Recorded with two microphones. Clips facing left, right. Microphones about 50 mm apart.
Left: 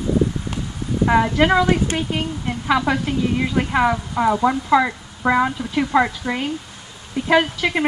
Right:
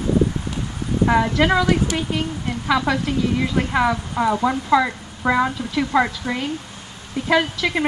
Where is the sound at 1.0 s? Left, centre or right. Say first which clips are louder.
Left 1 dB; centre.